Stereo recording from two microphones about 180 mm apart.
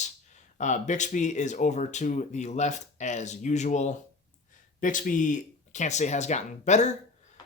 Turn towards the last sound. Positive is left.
turn(degrees=40)  # may be behind; listen again after turning